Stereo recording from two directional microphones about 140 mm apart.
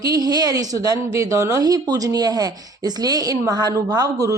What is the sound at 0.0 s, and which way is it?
Speech, 25° right (ahead or behind).